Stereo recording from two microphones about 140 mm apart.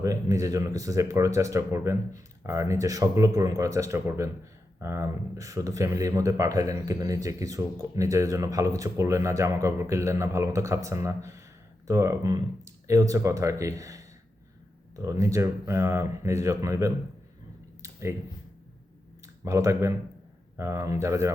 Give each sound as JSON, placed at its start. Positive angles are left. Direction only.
{"t": 0.0, "sound": "speech", "side_deg": -25}
{"t": 19.2, "sound": "speech", "side_deg": -20}